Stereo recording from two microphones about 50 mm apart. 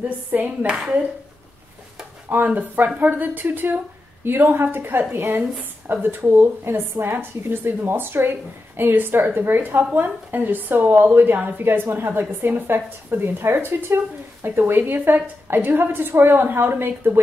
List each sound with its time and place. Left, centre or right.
0.0 s a woman's voice: right
0.7 s speech: right
2.2 s a woman's voice: right
11.6 s a woman's voice: right